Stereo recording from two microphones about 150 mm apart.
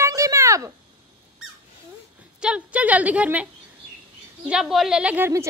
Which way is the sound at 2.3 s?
5° right (ahead or behind).